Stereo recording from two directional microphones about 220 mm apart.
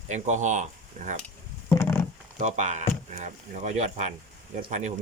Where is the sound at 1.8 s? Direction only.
10° left (ahead or behind).